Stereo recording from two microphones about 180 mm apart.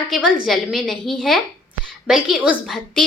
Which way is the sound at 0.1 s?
5° right (ahead or behind).